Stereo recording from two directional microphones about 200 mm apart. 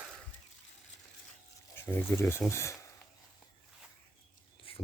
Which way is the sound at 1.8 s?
10° left (ahead or behind).